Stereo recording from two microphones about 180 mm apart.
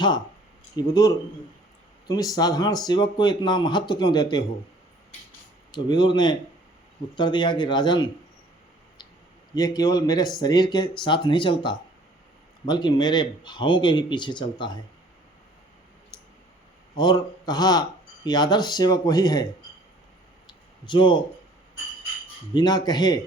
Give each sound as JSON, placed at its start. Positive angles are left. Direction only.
{"t": 0.8, "sound": "speech", "side_deg": 20}
{"t": 5.7, "sound": "speech", "side_deg": 25}
{"t": 9.6, "sound": "speech", "side_deg": 20}
{"t": 16.1, "sound": "clicking", "side_deg": 20}
{"t": 17.0, "sound": "speech", "side_deg": 25}
{"t": 20.5, "sound": "a sound", "side_deg": 25}
{"t": 22.5, "sound": "speech", "side_deg": 25}